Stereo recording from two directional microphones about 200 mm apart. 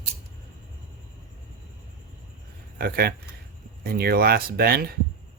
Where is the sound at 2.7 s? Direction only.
50° right (ahead or behind).